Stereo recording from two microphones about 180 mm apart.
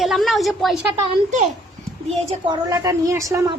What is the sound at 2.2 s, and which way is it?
A woman's voice, 30° right (ahead or behind).